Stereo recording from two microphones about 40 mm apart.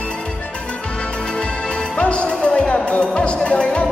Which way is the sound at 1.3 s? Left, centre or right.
Left.